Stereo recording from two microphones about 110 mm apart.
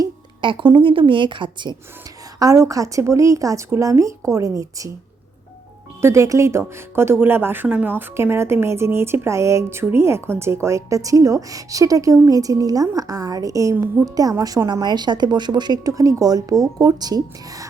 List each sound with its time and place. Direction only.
0.4 s a woman's voice: 45° right (ahead or behind)
2.4 s speech: 30° right (ahead or behind)
6.0 s speech: 25° right (ahead or behind)
13.7 s speech: 20° right (ahead or behind)
14.0 s a woman's voice: 35° right (ahead or behind)